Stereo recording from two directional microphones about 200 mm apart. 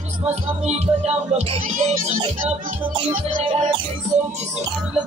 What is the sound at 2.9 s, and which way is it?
Music, 25° right (ahead or behind).